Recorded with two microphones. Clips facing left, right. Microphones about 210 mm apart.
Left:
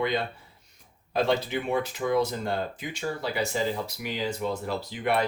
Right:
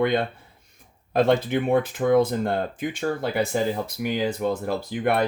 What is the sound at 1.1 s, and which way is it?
Speech, 55° right (ahead or behind).